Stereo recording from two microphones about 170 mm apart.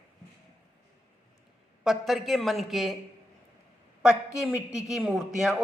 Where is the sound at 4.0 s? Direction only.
Centre (ahead or behind).